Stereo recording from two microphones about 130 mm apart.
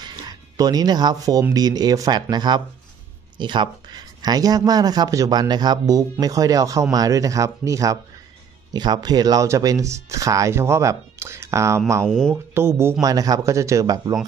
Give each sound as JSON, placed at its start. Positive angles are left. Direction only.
{"t": 0.1, "sound": "a sound", "side_deg": -30}
{"t": 1.5, "sound": "speech", "side_deg": -30}
{"t": 12.1, "sound": "speech", "side_deg": 5}
{"t": 12.5, "sound": "speech", "side_deg": -20}
{"t": 13.0, "sound": "speech", "side_deg": -30}